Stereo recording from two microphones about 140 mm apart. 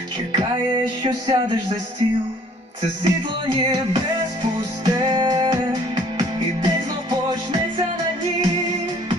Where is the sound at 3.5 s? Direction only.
35° right (ahead or behind).